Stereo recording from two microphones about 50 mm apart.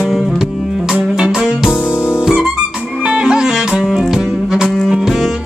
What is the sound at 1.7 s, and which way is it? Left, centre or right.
Music, left.